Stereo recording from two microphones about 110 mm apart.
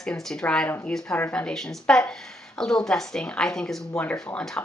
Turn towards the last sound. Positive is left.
turn(degrees=10)  # may be behind; listen again after turning